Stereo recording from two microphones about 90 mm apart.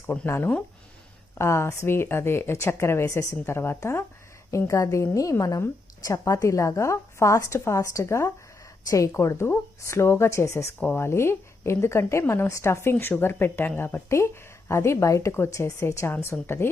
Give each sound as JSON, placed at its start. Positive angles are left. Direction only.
{"t": 0.0, "sound": "a woman's voice", "side_deg": 25}